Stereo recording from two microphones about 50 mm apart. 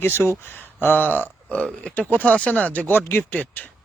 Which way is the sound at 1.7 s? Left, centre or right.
Centre.